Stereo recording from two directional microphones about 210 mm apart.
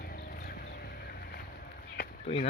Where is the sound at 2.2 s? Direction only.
30° left (ahead or behind).